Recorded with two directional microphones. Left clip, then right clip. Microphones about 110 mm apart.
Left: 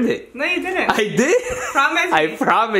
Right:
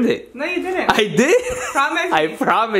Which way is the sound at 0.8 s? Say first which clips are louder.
Right 3 dB; 15° right (ahead or behind).